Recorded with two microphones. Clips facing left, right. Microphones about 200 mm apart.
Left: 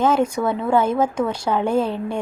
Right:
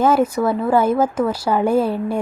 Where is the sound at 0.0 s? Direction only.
5° right (ahead or behind).